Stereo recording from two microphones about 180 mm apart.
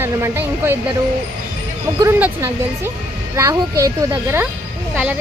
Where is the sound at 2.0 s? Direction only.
15° right (ahead or behind).